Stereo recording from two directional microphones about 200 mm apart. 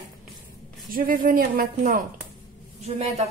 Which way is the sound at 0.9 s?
45° right (ahead or behind).